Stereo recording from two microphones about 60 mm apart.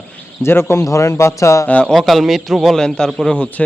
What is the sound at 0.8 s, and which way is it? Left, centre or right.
Speech, left.